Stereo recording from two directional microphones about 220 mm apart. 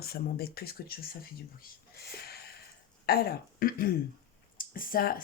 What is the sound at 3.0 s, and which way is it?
Speech, 40° left (ahead or behind).